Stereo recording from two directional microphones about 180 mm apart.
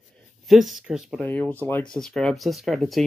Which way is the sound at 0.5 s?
Centre (ahead or behind).